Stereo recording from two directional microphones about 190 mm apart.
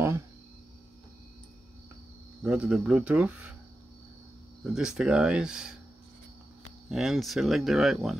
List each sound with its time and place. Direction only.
2.4 s speech: 5° right (ahead or behind)
4.7 s speech: 5° right (ahead or behind)
6.9 s speech: centre (ahead or behind)